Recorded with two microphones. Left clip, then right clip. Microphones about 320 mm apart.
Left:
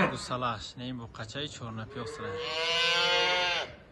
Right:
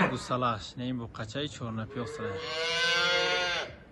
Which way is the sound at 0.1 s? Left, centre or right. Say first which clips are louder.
Right 3 dB; centre.